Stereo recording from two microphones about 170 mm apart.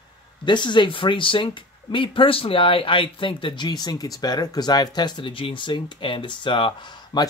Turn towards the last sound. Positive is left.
turn(degrees=25)  # may be behind; listen again after turning